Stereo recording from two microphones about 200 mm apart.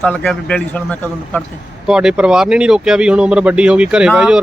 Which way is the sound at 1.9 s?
5° right (ahead or behind).